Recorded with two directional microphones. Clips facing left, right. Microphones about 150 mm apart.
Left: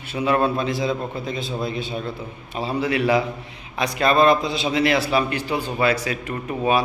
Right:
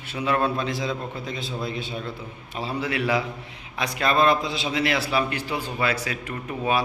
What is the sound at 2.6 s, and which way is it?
A man's voice, 20° left (ahead or behind).